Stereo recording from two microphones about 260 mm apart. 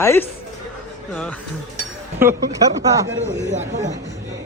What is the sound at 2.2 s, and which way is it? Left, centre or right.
Speech, centre.